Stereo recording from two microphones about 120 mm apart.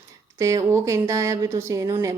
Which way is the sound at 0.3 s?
25° right (ahead or behind).